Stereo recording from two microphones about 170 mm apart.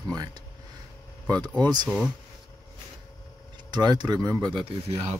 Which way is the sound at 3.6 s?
25° right (ahead or behind).